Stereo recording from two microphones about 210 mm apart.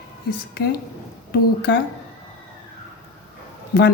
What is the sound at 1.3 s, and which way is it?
Speech, 55° left (ahead or behind).